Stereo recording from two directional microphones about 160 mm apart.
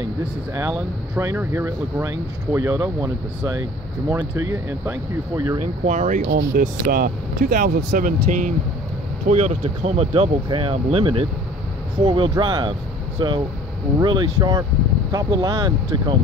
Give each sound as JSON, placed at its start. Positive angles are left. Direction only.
{"t": 0.6, "sound": "speech", "side_deg": -15}
{"t": 5.9, "sound": "speech", "side_deg": -50}
{"t": 6.2, "sound": "speech", "side_deg": -60}